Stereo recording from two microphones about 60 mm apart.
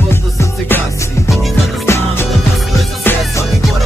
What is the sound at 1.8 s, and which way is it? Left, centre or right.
Music, left.